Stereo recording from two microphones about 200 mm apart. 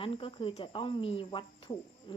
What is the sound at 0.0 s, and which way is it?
Speech, 25° left (ahead or behind).